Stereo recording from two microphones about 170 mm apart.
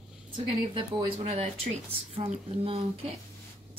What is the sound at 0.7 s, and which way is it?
Speech, 30° right (ahead or behind).